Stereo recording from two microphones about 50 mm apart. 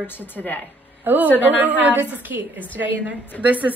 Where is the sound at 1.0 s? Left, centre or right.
Right.